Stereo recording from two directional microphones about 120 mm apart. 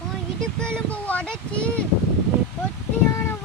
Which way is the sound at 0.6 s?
10° left (ahead or behind).